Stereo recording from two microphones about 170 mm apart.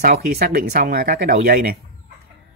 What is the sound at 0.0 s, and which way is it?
Speech, 60° right (ahead or behind).